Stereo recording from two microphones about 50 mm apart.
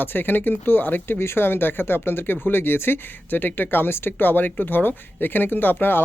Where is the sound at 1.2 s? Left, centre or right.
Left.